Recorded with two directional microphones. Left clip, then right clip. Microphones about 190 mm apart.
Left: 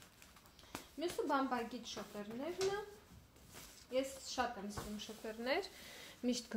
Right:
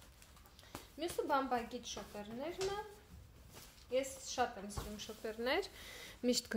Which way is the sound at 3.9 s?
35° right (ahead or behind).